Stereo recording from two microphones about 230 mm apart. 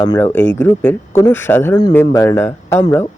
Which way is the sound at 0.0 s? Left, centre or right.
Centre.